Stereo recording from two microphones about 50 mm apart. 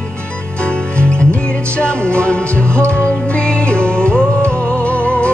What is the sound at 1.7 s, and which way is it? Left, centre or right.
Music, left.